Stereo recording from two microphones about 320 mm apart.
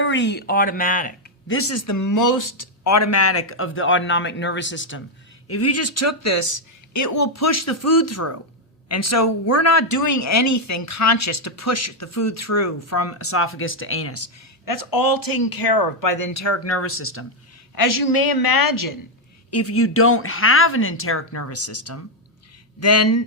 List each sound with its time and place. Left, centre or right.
0.0 s speech: left
1.5 s speech: left
14.6 s speech: left
17.7 s a woman's voice: left
19.5 s speech: left